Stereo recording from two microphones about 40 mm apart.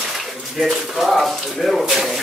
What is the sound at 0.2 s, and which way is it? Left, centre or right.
Speech, centre.